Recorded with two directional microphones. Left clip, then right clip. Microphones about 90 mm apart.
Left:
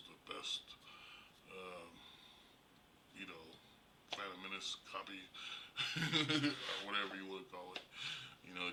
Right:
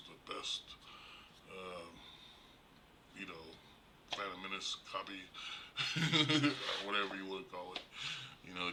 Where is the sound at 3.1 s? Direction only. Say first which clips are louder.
Right 3 dB; 15° left (ahead or behind).